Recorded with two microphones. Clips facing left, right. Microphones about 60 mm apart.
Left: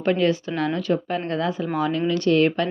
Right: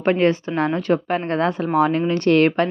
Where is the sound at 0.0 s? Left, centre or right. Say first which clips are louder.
Right 3 dB; right.